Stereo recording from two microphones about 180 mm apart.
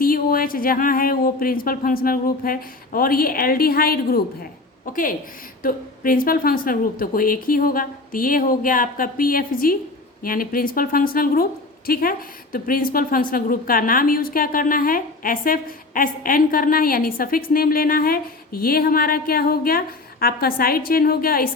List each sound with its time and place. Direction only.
0.0 s a woman's voice: 55° left (ahead or behind)